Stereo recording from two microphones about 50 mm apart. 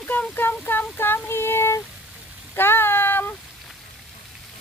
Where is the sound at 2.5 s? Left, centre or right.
Left.